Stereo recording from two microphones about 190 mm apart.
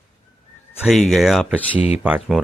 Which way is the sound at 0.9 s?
Centre (ahead or behind).